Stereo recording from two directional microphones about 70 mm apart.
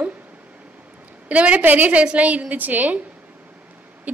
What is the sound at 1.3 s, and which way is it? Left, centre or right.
A woman's voice, centre.